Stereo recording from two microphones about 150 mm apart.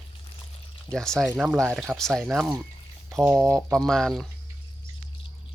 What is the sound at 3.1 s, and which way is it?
Speech, 20° right (ahead or behind).